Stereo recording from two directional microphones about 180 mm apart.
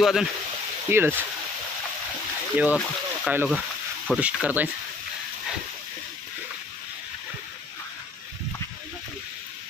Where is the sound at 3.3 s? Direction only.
10° right (ahead or behind).